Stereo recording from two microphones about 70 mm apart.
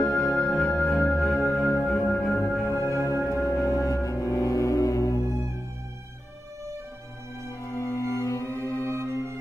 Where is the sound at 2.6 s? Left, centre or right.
Left.